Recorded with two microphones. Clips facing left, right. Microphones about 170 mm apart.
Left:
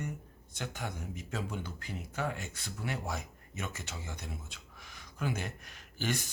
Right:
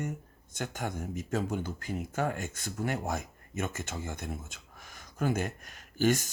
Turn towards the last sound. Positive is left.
turn(degrees=-45)  # may be behind; listen again after turning